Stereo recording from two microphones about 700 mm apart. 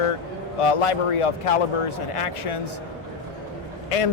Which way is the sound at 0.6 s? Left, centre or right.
Left.